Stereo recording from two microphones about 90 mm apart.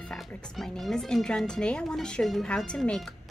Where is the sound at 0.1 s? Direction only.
5° left (ahead or behind).